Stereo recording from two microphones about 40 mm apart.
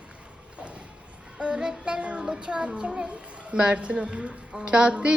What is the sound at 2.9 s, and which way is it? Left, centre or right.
Speech, right.